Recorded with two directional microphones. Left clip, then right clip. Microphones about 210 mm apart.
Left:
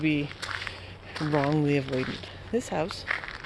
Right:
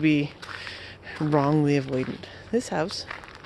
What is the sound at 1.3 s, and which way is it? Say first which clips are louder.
Speech: right 3 dB; 45° right (ahead or behind).